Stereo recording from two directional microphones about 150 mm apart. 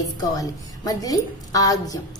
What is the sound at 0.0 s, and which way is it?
A woman's voice, 25° left (ahead or behind).